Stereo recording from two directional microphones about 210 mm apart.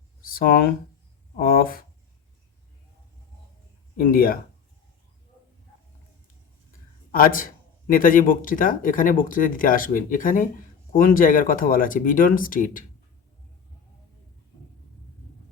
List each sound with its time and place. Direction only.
0.2 s a sound: 45° left (ahead or behind)
1.4 s speech: 45° left (ahead or behind)
3.9 s speech: 45° left (ahead or behind)
7.1 s speech: 40° left (ahead or behind)